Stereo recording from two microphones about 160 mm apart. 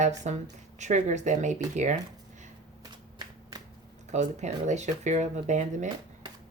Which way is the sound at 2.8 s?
25° right (ahead or behind).